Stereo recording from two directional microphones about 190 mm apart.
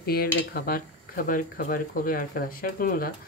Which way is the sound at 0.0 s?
55° left (ahead or behind).